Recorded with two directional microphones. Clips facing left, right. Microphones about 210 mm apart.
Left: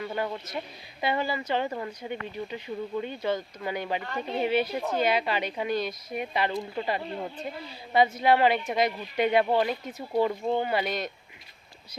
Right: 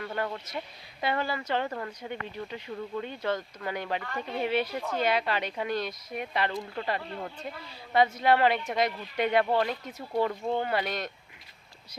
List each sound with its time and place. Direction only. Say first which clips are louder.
0.0 s speech: left 2 dB; 10° left (ahead or behind)
4.0 s speech: left 3 dB; 25° left (ahead or behind)
4.9 s speech: left 1 dB; 5° left (ahead or behind)
7.9 s speech: left 1 dB; 5° left (ahead or behind)